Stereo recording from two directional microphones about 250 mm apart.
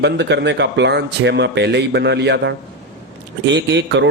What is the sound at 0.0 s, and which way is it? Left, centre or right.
A man's voice, right.